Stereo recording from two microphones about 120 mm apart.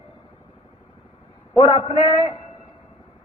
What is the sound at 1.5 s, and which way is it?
Speech, 45° left (ahead or behind).